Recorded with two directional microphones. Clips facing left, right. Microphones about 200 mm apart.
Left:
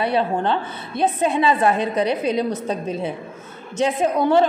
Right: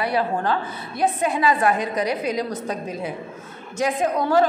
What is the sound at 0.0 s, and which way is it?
A woman's voice, 25° left (ahead or behind).